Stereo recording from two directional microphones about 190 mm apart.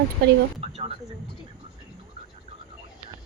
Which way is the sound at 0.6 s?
30° right (ahead or behind).